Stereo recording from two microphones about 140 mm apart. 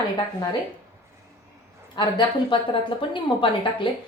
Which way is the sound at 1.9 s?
35° left (ahead or behind).